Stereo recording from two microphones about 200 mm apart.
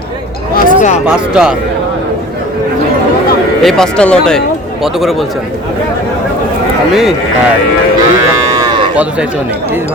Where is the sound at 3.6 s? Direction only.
Centre (ahead or behind).